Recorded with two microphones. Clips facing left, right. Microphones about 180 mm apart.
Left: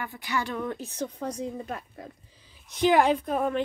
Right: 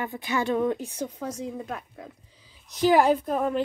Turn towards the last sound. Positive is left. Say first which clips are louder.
# right 2 dB
turn(degrees=0)  # may be behind; listen again after turning